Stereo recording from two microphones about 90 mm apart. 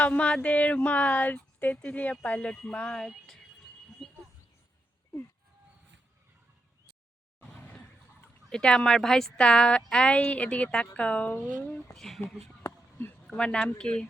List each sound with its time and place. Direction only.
0.0 s speech: 15° left (ahead or behind)
8.4 s speech: 10° left (ahead or behind)
11.9 s speech: centre (ahead or behind)
12.6 s a sound: 20° left (ahead or behind)
13.3 s speech: 10° left (ahead or behind)